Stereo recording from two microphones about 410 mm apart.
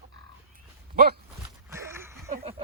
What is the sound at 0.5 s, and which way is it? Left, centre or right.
Dog, right.